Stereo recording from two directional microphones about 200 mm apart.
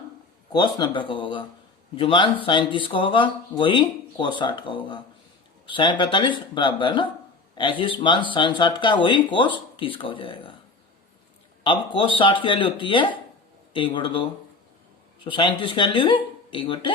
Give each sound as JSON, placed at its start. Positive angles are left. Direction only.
{"t": 0.8, "sound": "speech", "side_deg": 25}
{"t": 11.6, "sound": "speech", "side_deg": 25}